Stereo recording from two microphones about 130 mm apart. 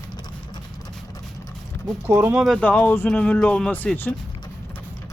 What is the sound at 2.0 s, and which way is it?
Speech, 15° right (ahead or behind).